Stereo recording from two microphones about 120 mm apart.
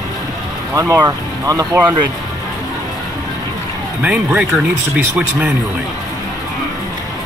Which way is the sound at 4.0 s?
10° right (ahead or behind).